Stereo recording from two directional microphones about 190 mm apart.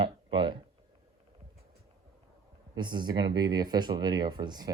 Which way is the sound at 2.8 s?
25° right (ahead or behind).